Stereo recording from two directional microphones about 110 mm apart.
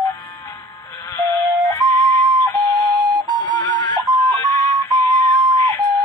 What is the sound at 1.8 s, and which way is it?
Music, 40° right (ahead or behind).